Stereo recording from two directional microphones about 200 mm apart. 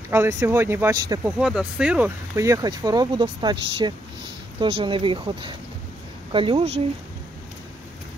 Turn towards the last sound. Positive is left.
turn(degrees=-30)  # may be behind; listen again after turning